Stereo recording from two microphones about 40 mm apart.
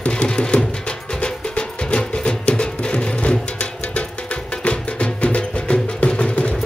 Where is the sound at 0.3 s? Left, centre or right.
Centre.